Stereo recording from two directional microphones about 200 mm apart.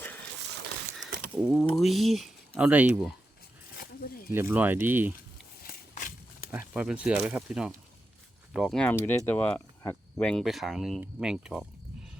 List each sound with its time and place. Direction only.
0.9 s speech: centre (ahead or behind)
4.3 s speech: 10° right (ahead or behind)
5.6 s walk: 40° left (ahead or behind)
6.5 s speech: 5° right (ahead or behind)